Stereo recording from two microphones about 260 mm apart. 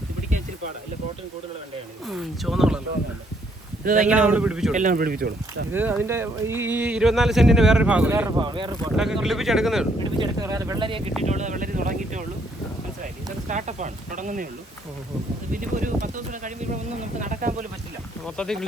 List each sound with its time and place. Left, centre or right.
2.0 s speech: centre
3.8 s speech: right
4.1 s speech: centre
4.7 s speech: right
5.7 s speech: centre
9.0 s speech: centre
10.2 s speech: centre; by 12.2 s right
13.5 s speech: right
15.6 s speech: right
18.3 s speech: centre